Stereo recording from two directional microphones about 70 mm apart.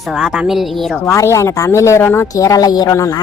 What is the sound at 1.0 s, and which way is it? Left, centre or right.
Speech, left.